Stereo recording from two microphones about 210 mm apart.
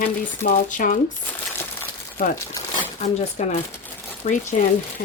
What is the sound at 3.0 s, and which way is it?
Speech, 30° left (ahead or behind).